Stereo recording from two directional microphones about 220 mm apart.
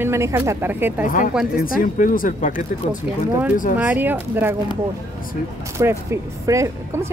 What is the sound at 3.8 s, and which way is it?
Speech, 10° right (ahead or behind).